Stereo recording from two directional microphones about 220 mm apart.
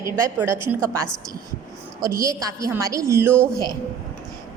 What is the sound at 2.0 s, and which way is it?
A woman's voice, 15° right (ahead or behind).